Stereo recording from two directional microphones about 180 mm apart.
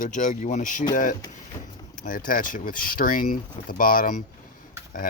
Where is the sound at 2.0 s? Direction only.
50° left (ahead or behind).